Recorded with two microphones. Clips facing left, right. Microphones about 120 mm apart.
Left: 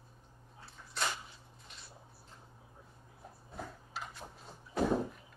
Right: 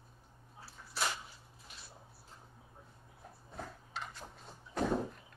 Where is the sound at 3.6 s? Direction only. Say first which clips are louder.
Even; centre (ahead or behind).